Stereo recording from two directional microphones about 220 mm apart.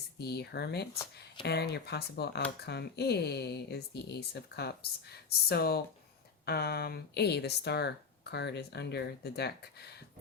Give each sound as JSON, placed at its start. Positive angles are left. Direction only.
{"t": 0.2, "sound": "speech", "side_deg": 50}